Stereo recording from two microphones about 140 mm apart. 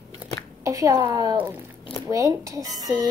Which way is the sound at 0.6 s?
25° right (ahead or behind).